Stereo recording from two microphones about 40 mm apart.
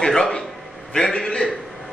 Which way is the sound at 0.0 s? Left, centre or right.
Centre.